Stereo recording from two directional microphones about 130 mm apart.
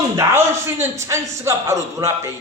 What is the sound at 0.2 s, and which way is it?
A man's voice, 20° right (ahead or behind).